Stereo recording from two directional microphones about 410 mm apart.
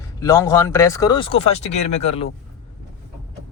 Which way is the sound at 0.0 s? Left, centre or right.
Centre.